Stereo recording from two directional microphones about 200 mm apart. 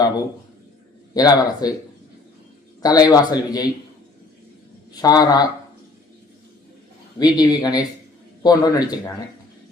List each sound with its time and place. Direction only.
1.1 s a man's voice: 20° left (ahead or behind)
2.8 s a man's voice: 20° left (ahead or behind)
4.9 s a man's voice: 20° left (ahead or behind)
7.2 s a man's voice: 20° left (ahead or behind)